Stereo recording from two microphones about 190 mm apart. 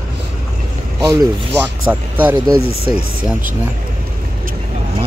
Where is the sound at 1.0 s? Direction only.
20° right (ahead or behind).